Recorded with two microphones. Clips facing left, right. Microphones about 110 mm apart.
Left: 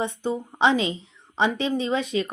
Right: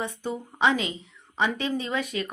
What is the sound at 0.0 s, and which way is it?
Speech, 25° left (ahead or behind).